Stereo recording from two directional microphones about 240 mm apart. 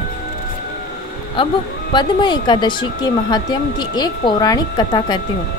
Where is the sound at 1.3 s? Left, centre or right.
Left.